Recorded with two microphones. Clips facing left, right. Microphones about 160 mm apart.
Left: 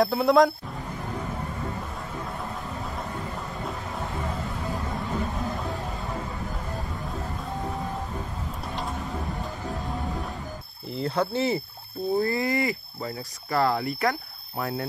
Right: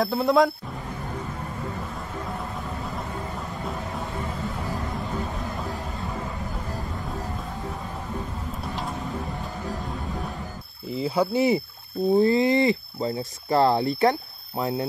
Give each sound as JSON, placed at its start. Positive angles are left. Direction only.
{"t": 0.0, "sound": "speech", "side_deg": 0}
{"t": 11.0, "sound": "speech", "side_deg": -10}